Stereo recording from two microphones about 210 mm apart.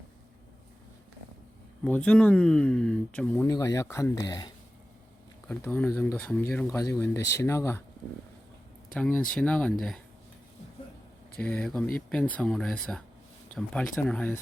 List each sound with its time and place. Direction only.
1.8 s speech: 5° left (ahead or behind)
3.5 s speech: 15° left (ahead or behind)
5.5 s speech: 10° left (ahead or behind)
9.0 s speech: 5° left (ahead or behind)
11.3 s speech: 5° left (ahead or behind)